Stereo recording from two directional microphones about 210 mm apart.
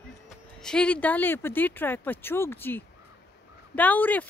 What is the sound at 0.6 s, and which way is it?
Speech, 5° left (ahead or behind).